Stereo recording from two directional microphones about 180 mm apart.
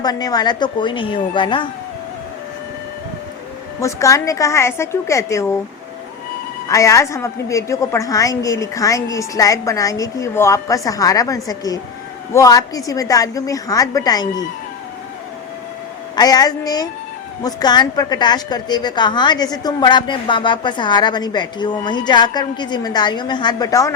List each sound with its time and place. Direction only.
0.0 s a woman's voice: 20° left (ahead or behind)
3.8 s a woman's voice: 15° left (ahead or behind)
6.7 s a woman's voice: 15° left (ahead or behind)
16.1 s a woman's voice: 20° left (ahead or behind)